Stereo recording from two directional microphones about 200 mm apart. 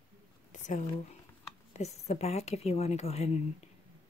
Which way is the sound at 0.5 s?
40° left (ahead or behind).